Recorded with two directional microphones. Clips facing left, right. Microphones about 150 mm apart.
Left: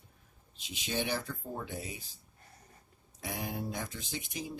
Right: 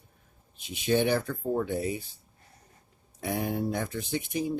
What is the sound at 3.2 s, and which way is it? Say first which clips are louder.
Speech: right 8 dB; 55° right (ahead or behind).